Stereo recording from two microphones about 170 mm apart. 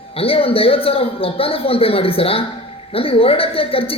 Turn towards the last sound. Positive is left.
turn(degrees=35)  # may be behind; listen again after turning